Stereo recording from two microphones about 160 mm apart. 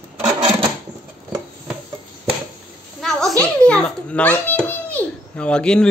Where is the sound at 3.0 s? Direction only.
Centre (ahead or behind).